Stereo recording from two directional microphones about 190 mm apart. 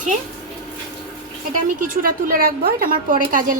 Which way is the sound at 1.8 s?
45° right (ahead or behind).